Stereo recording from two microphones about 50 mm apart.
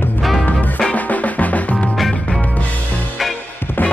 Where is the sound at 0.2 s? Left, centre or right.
Centre.